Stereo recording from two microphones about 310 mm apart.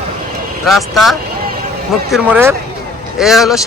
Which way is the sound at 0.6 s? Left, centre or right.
Centre.